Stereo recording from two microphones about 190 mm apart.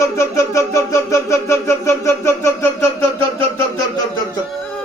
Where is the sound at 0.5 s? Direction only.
15° left (ahead or behind).